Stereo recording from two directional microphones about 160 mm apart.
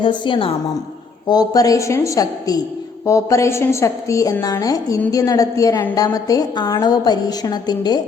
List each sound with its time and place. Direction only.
0.0 s a woman's voice: 30° left (ahead or behind)